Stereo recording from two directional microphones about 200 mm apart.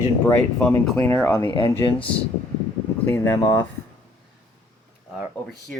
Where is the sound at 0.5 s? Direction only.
5° left (ahead or behind).